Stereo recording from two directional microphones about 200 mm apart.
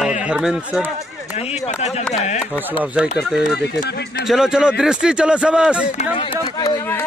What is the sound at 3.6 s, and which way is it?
Speech, 50° left (ahead or behind).